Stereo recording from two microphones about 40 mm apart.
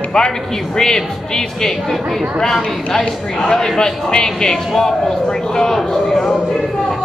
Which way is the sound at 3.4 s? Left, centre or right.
Centre.